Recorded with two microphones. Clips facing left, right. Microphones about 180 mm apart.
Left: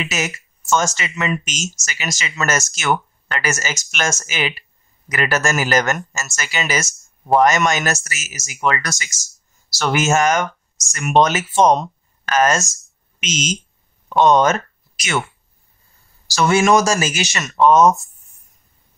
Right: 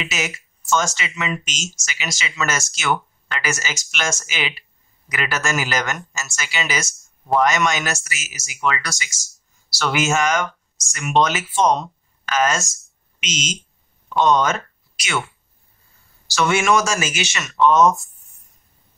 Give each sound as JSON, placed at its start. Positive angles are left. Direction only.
{"t": 0.0, "sound": "speech", "side_deg": 45}
{"t": 16.3, "sound": "speech", "side_deg": 40}